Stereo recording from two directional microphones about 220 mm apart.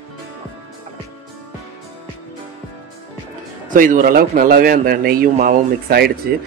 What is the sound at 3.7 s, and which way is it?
A man's voice, 35° right (ahead or behind).